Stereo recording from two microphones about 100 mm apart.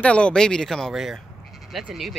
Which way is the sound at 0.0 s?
10° left (ahead or behind).